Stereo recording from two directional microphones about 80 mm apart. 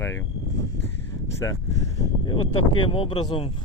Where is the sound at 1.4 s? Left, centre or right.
Left.